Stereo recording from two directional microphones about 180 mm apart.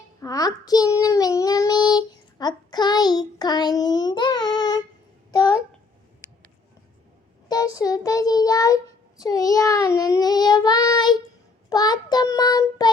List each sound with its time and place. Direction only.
0.2 s child singing: 20° left (ahead or behind)
7.4 s child singing: 20° left (ahead or behind)